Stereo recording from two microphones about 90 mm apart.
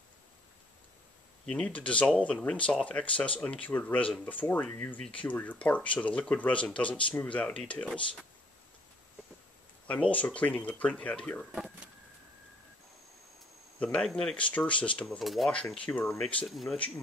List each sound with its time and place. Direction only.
1.4 s speech: 10° left (ahead or behind)
9.8 s speech: 15° left (ahead or behind)
11.5 s speech: 5° right (ahead or behind)
13.7 s speech: 15° left (ahead or behind)
15.0 s speech: centre (ahead or behind)
16.4 s speech: centre (ahead or behind)